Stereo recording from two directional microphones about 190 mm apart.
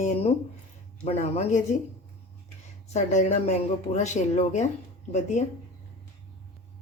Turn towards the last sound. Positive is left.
turn(degrees=40)  # may be behind; listen again after turning